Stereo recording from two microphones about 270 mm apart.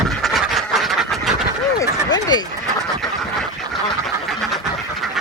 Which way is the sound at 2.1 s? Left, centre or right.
Centre.